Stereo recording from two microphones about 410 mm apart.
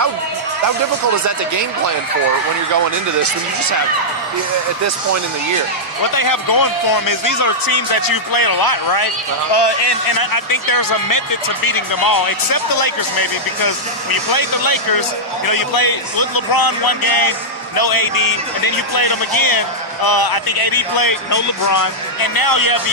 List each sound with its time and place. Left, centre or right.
6.1 s a man's voice: left
9.5 s a man's voice: left